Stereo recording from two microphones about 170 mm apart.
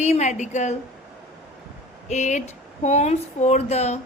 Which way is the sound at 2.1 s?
45° left (ahead or behind).